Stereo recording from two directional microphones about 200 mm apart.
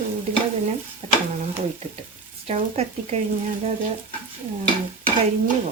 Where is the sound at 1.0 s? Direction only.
30° right (ahead or behind).